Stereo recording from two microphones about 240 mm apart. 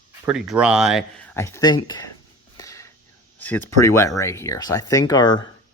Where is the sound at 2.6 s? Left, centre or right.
Centre.